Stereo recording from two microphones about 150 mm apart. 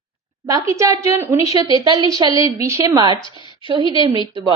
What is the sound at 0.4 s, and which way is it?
A woman's voice, 20° right (ahead or behind).